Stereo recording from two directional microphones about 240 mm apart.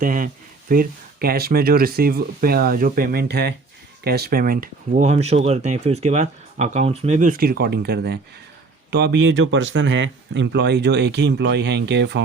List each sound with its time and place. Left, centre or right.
0.0 s speech: right